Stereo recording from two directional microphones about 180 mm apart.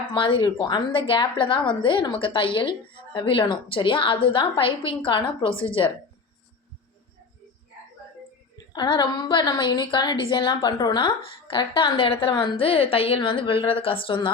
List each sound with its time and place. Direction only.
0.1 s a woman's voice: 25° left (ahead or behind)
8.7 s a woman's voice: 25° left (ahead or behind)